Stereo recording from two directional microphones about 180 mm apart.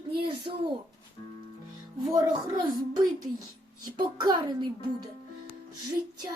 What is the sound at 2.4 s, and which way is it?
Speech, 20° right (ahead or behind).